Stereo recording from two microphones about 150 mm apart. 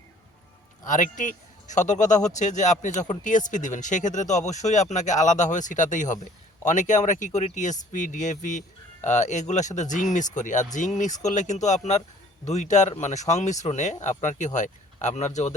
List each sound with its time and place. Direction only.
0.9 s speech: 60° left (ahead or behind)